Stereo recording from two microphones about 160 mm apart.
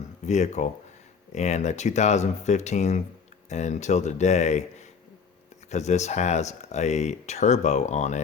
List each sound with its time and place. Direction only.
0.3 s speech: 45° left (ahead or behind)
5.7 s speech: 45° left (ahead or behind)